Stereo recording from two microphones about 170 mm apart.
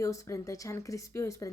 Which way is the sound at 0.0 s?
20° left (ahead or behind).